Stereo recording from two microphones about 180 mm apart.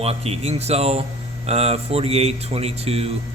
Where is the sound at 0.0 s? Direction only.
35° right (ahead or behind).